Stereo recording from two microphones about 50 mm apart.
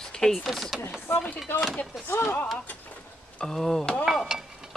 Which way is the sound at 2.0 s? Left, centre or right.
Left.